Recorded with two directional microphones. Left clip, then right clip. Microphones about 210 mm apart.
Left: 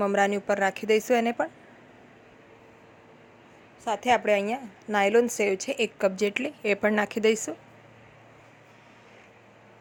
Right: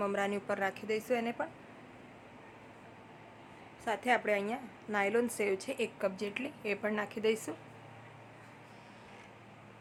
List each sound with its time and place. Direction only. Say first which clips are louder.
0.0 s a woman's voice: left 10 dB; 30° left (ahead or behind)
3.8 s a woman's voice: left 8 dB; 25° left (ahead or behind)